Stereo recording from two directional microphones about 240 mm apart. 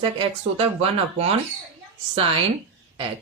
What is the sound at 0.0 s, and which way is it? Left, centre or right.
A woman's voice, right.